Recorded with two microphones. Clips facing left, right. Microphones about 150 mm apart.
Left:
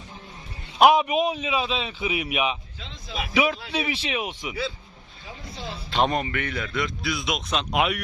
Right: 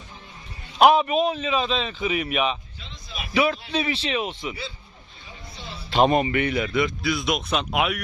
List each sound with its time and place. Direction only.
0.8 s a man's voice: 10° left (ahead or behind)
2.8 s speech: 90° left
3.3 s a man's voice: 10° left (ahead or behind)
6.1 s speech: 10° right (ahead or behind)